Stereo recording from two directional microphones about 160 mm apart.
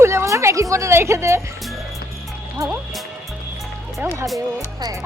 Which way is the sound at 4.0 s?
15° right (ahead or behind).